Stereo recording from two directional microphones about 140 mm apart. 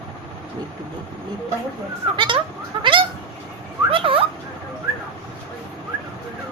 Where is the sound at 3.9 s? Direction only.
40° right (ahead or behind).